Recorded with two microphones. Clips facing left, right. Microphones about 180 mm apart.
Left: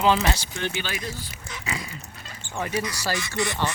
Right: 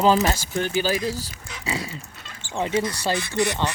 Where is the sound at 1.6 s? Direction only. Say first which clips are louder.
Right 4 dB; 30° right (ahead or behind).